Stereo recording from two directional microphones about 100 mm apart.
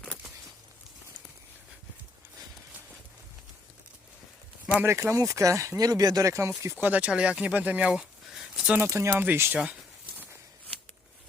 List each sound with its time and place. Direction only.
4.8 s speech: 25° right (ahead or behind)
8.9 s speech: 30° right (ahead or behind)